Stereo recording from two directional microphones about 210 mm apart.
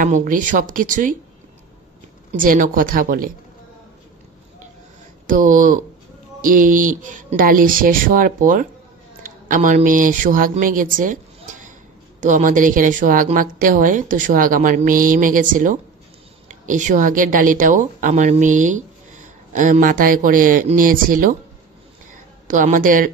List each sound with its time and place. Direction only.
0.0 s a woman's voice: 40° right (ahead or behind)
2.3 s a woman's voice: 40° right (ahead or behind)
5.2 s a woman's voice: 40° right (ahead or behind)
12.2 s a woman's voice: 35° right (ahead or behind)
22.1 s a sound: 35° right (ahead or behind)